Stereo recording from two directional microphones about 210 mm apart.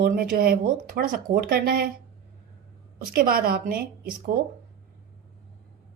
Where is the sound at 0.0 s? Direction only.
45° right (ahead or behind).